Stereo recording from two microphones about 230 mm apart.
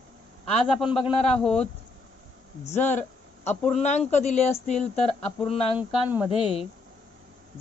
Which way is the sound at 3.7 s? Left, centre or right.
Left.